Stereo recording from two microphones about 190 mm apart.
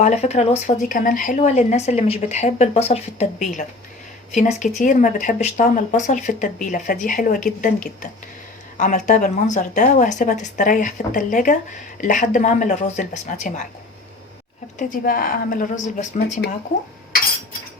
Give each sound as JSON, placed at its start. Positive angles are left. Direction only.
{"t": 0.0, "sound": "a woman's voice", "side_deg": 35}
{"t": 8.8, "sound": "speech", "side_deg": 40}
{"t": 14.8, "sound": "a woman's voice", "side_deg": 45}